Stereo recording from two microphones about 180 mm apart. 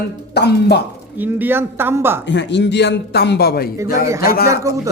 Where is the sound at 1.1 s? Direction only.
10° right (ahead or behind).